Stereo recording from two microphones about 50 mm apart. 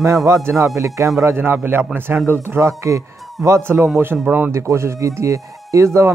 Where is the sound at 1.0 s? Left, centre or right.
Right.